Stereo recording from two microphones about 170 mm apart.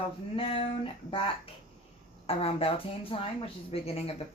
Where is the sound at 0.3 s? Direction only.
30° left (ahead or behind).